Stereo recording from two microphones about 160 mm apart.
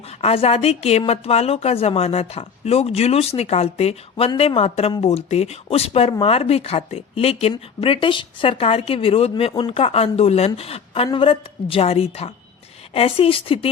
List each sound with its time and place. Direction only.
0.2 s speech: 40° left (ahead or behind)